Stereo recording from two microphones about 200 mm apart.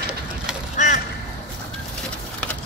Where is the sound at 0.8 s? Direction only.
40° left (ahead or behind).